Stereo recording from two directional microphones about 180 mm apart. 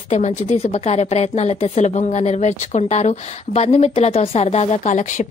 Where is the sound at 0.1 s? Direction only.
40° left (ahead or behind).